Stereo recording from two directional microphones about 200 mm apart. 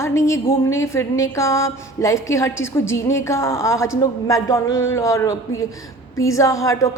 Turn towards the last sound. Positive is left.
turn(degrees=15)  # may be behind; listen again after turning